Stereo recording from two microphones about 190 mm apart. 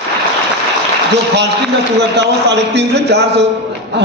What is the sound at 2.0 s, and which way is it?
A man's voice, 65° right (ahead or behind).